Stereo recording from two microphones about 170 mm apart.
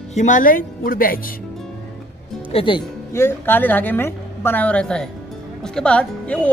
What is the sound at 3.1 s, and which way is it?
Speech, 15° left (ahead or behind).